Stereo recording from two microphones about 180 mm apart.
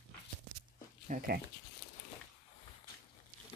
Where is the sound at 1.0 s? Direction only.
50° right (ahead or behind).